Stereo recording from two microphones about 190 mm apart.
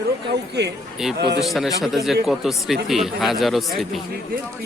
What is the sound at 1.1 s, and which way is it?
Speech, 60° right (ahead or behind).